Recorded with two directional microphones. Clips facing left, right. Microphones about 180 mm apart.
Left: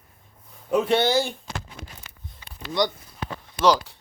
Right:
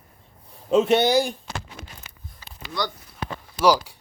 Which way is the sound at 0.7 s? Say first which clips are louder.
Right 3 dB; 20° right (ahead or behind).